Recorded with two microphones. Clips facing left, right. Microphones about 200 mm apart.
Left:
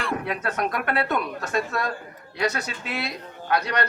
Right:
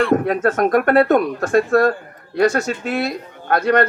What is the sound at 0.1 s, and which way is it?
Speech, 50° right (ahead or behind).